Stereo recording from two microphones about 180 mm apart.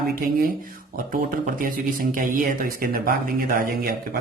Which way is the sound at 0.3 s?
55° right (ahead or behind).